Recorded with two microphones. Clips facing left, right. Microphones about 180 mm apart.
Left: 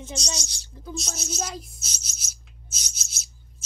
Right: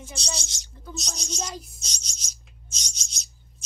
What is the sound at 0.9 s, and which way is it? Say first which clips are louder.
Speech: left 2 dB; 5° left (ahead or behind).